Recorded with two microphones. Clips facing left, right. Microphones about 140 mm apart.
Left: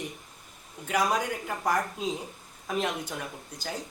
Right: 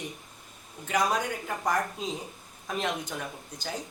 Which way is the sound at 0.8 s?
5° left (ahead or behind).